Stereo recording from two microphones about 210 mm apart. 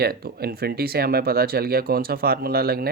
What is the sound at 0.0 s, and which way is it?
Speech, 45° right (ahead or behind).